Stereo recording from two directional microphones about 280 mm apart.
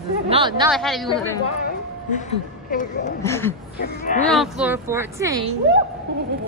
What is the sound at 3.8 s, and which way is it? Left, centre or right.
Speech, left.